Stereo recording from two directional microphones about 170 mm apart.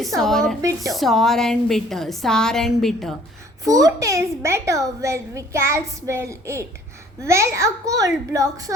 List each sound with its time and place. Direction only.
0.2 s a woman's voice: centre (ahead or behind)
0.6 s speech: 20° right (ahead or behind)
0.9 s a woman's voice: centre (ahead or behind)
3.6 s a woman's voice: 20° right (ahead or behind)